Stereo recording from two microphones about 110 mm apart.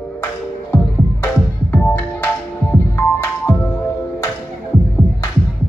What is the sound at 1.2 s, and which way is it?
Music, 20° left (ahead or behind).